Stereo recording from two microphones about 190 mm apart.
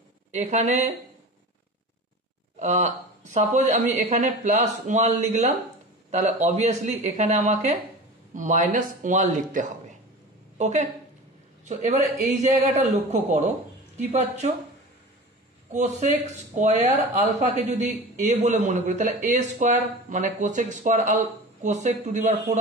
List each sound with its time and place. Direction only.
0.3 s a man's voice: 35° right (ahead or behind)
2.6 s a man's voice: 35° right (ahead or behind)
15.7 s a man's voice: 40° right (ahead or behind)